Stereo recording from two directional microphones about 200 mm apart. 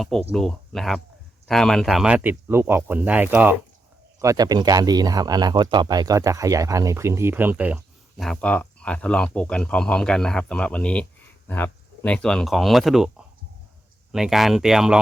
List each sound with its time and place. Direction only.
0.3 s speech: centre (ahead or behind)
8.2 s speech: 5° left (ahead or behind)